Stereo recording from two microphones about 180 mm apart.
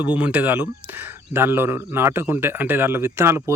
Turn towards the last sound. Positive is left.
turn(degrees=-15)  # may be behind; listen again after turning